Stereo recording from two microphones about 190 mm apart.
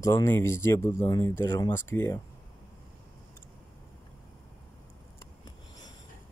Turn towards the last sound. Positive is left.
turn(degrees=20)  # may be behind; listen again after turning